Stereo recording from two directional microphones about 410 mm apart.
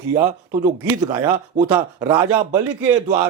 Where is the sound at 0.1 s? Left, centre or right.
Centre.